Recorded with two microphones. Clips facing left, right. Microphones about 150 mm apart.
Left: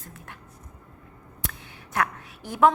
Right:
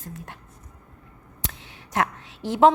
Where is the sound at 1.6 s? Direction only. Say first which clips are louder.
Right 2 dB; 25° right (ahead or behind).